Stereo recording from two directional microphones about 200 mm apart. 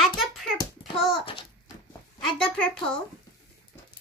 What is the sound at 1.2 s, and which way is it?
Speech, 25° left (ahead or behind).